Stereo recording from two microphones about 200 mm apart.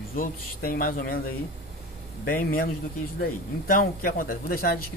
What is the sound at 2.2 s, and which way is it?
Speech, 45° left (ahead or behind).